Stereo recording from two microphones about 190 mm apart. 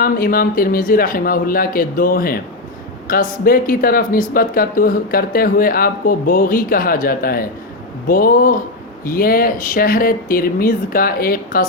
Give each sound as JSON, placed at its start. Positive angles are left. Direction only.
{"t": 0.0, "sound": "speech", "side_deg": 50}